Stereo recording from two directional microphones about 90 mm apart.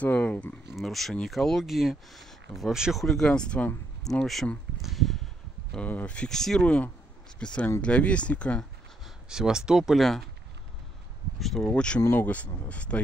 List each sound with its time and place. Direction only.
0.0 s speech: 15° left (ahead or behind)
0.7 s speech: 5° left (ahead or behind)
4.8 s a sound: centre (ahead or behind)
5.9 s speech: 15° left (ahead or behind)
9.0 s speech: 5° right (ahead or behind)
11.3 s speech: 5° left (ahead or behind)